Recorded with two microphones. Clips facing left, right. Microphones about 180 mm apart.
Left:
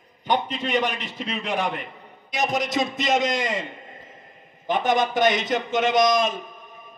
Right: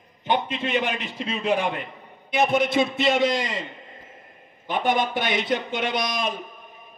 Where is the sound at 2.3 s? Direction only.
40° left (ahead or behind).